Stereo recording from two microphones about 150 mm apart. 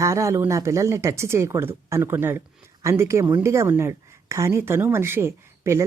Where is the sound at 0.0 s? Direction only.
20° right (ahead or behind).